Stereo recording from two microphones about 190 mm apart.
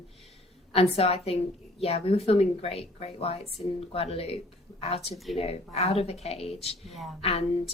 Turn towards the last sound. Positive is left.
turn(degrees=30)  # may be behind; listen again after turning